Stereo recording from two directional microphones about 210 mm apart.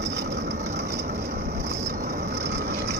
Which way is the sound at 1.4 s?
50° right (ahead or behind).